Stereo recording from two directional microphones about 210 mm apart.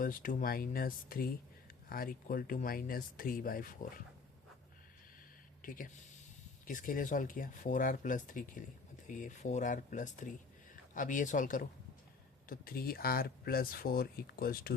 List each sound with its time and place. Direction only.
0.0 s speech: 40° left (ahead or behind)
5.6 s speech: 40° left (ahead or behind)